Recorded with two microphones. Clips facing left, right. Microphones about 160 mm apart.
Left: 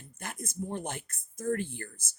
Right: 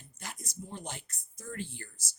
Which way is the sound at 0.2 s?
55° left (ahead or behind).